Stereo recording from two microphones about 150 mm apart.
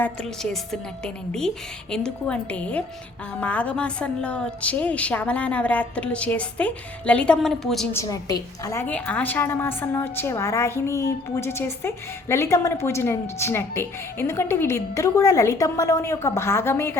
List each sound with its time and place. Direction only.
0.4 s a woman's voice: 5° left (ahead or behind)
7.9 s a woman's voice: 20° left (ahead or behind)